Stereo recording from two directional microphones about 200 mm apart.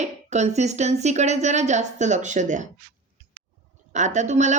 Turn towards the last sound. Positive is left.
turn(degrees=-35)  # may be behind; listen again after turning